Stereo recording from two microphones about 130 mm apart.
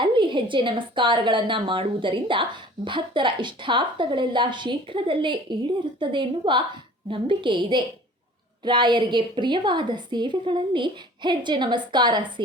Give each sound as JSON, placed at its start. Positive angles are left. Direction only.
{"t": 0.0, "sound": "a woman's voice", "side_deg": -40}